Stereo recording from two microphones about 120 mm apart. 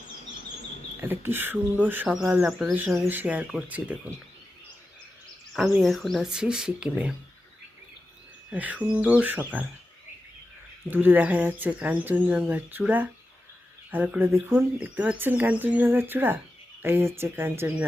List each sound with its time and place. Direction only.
1.0 s speech: 20° right (ahead or behind)
2.5 s speech: centre (ahead or behind)
2.9 s speech: 20° right (ahead or behind)
5.5 s speech: 5° right (ahead or behind)
8.4 s speech: 10° right (ahead or behind)
10.9 s speech: 15° right (ahead or behind)